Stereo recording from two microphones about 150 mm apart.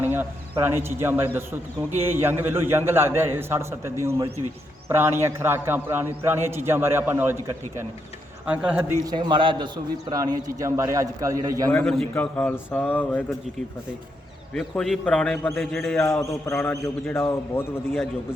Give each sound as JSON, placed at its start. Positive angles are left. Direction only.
{"t": 0.0, "sound": "a man's voice", "side_deg": -15}
{"t": 8.4, "sound": "a man's voice", "side_deg": -10}
{"t": 9.0, "sound": "a man's voice", "side_deg": -30}
{"t": 11.7, "sound": "a man's voice", "side_deg": 10}
{"t": 14.5, "sound": "a man's voice", "side_deg": 0}
{"t": 15.7, "sound": "a man's voice", "side_deg": 0}
{"t": 16.3, "sound": "a man's voice", "side_deg": 20}